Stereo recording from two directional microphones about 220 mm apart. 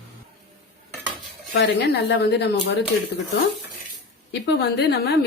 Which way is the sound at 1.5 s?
50° left (ahead or behind).